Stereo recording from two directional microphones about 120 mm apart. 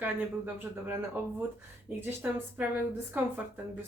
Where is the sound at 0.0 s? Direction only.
15° right (ahead or behind).